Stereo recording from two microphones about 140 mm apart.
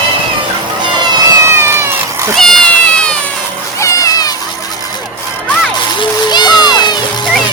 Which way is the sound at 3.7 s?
20° left (ahead or behind).